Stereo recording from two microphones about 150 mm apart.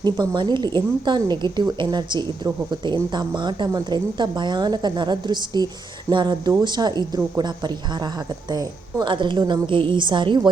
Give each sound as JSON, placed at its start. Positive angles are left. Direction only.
{"t": 0.0, "sound": "a man's voice", "side_deg": -30}